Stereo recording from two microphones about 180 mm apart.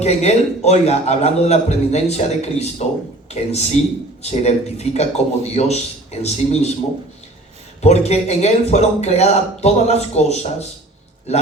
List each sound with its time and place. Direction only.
0.0 s a man's voice: 35° left (ahead or behind)
7.8 s a man's voice: 40° left (ahead or behind)